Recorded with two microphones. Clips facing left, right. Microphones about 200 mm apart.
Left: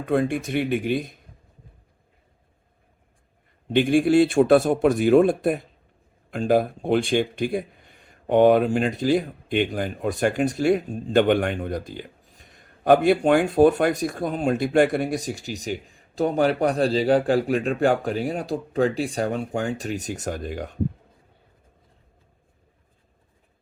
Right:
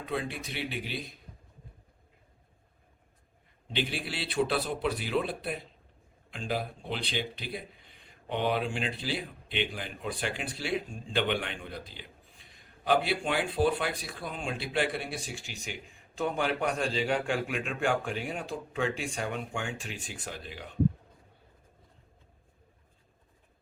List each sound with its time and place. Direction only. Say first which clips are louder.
0.0 s speech: left 12 dB; 50° left (ahead or behind)
3.7 s speech: left 16 dB; 50° left (ahead or behind)